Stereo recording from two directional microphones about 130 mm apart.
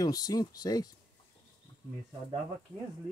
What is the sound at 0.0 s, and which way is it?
Speech, 30° left (ahead or behind).